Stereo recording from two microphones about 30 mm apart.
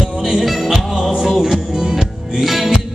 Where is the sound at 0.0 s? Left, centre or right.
Centre.